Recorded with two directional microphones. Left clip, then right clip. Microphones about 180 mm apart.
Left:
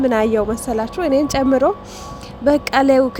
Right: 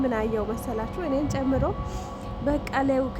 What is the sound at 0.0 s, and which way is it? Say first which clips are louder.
A woman's voice: left 10 dB; 40° left (ahead or behind).